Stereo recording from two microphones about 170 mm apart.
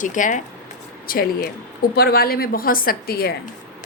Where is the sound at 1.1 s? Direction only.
60° left (ahead or behind).